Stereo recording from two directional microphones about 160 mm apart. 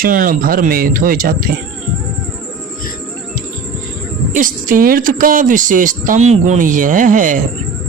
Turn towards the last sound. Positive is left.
turn(degrees=-55)  # may be behind; listen again after turning